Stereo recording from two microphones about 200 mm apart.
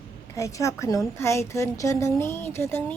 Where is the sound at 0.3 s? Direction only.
15° left (ahead or behind).